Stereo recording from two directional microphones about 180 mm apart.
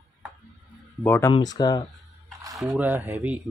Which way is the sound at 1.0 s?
10° left (ahead or behind).